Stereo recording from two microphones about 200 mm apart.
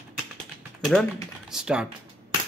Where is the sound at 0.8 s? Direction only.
Centre (ahead or behind).